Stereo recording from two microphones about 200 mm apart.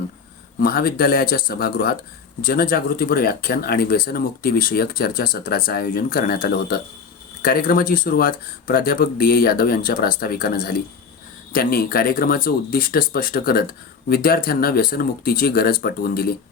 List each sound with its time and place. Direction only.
0.6 s speech: 50° left (ahead or behind)